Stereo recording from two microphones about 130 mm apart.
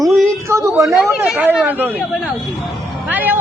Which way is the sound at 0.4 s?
20° right (ahead or behind).